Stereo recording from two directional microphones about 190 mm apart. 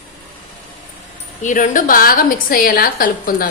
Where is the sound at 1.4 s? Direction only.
45° left (ahead or behind).